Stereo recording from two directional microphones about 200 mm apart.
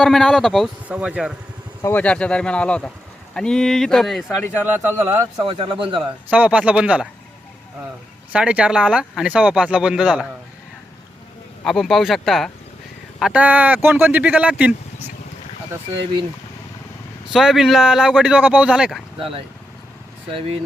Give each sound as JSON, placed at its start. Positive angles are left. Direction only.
{"t": 0.0, "sound": "speech", "side_deg": 0}
{"t": 1.8, "sound": "speech", "side_deg": 10}
{"t": 4.6, "sound": "speech", "side_deg": -10}
{"t": 5.4, "sound": "a man's voice", "side_deg": -25}
{"t": 6.3, "sound": "speech", "side_deg": -5}
{"t": 8.3, "sound": "speech", "side_deg": -5}
{"t": 11.6, "sound": "speech", "side_deg": 0}
{"t": 17.3, "sound": "speech", "side_deg": 0}